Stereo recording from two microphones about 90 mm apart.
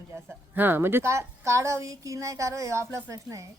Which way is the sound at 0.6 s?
25° right (ahead or behind).